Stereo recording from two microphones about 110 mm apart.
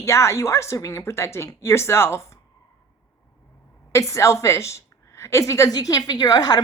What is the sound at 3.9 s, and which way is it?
A woman's voice, 30° left (ahead or behind).